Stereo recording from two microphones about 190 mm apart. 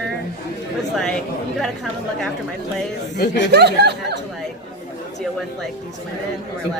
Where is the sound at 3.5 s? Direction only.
60° right (ahead or behind).